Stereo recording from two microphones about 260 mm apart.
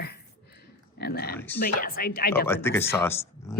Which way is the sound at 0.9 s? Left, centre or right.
Left.